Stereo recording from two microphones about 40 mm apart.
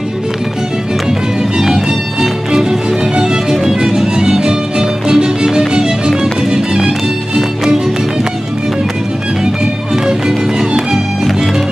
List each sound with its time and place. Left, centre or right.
3.2 s music: centre
10.0 s music: centre